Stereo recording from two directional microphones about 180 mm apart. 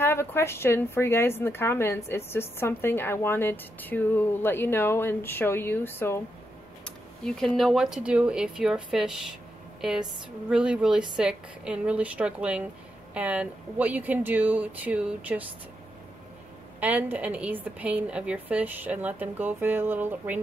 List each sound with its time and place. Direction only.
0.0 s a woman's voice: 15° left (ahead or behind); by 15.4 s 5° right (ahead or behind)
16.8 s a woman's voice: 10° right (ahead or behind)